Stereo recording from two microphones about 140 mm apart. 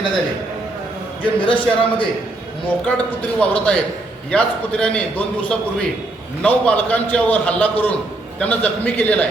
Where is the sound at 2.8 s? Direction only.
10° left (ahead or behind).